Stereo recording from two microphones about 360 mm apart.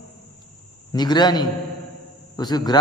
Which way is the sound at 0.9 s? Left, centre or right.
Centre.